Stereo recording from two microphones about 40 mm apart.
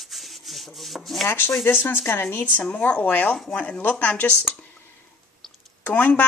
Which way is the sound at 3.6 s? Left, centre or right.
Left.